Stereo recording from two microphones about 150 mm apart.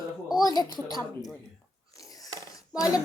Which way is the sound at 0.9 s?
25° left (ahead or behind).